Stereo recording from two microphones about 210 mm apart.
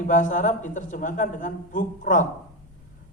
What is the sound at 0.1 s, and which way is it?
A man's voice, 40° left (ahead or behind).